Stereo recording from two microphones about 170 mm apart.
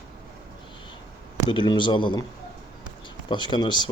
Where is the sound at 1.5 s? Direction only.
25° left (ahead or behind).